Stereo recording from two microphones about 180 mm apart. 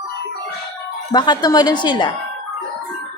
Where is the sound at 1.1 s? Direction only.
25° left (ahead or behind).